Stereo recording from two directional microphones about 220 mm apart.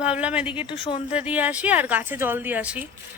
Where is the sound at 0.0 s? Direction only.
5° right (ahead or behind).